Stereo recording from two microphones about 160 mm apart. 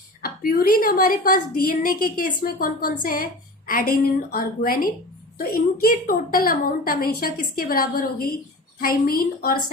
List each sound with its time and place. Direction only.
0.2 s a woman's voice: 65° left (ahead or behind)